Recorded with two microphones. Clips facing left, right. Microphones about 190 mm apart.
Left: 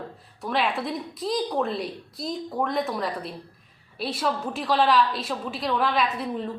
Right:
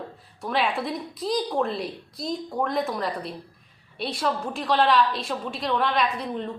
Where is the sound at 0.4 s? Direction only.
Centre (ahead or behind).